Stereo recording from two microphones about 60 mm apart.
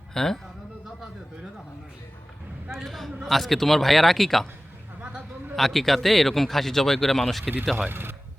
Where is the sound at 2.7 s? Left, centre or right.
Centre.